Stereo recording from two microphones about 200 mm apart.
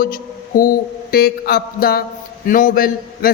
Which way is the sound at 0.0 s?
45° left (ahead or behind).